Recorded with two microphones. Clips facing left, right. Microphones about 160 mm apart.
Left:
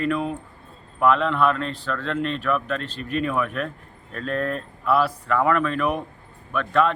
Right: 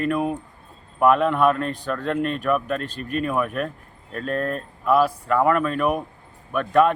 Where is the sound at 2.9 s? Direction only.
45° right (ahead or behind).